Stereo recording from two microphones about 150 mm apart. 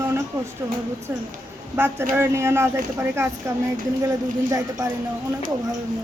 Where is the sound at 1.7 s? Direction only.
15° right (ahead or behind).